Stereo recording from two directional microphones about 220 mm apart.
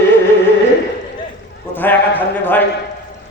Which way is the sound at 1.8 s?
10° left (ahead or behind).